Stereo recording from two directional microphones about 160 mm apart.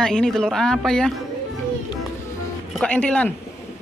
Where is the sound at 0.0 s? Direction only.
5° left (ahead or behind).